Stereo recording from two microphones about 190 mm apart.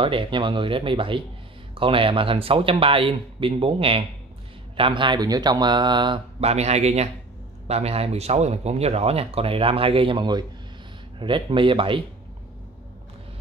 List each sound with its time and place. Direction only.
0.0 s speech: 30° right (ahead or behind)